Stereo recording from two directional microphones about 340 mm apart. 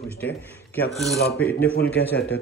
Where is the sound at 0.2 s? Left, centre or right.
Centre.